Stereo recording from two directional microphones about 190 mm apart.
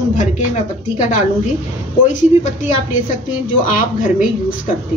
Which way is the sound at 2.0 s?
40° left (ahead or behind).